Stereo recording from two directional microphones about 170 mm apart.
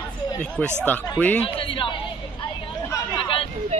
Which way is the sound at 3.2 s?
30° left (ahead or behind).